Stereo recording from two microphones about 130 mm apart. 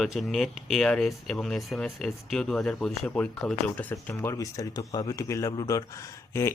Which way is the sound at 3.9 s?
20° left (ahead or behind).